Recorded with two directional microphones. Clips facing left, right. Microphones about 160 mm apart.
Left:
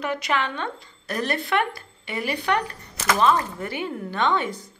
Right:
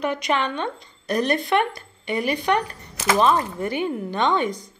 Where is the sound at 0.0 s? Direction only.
20° right (ahead or behind).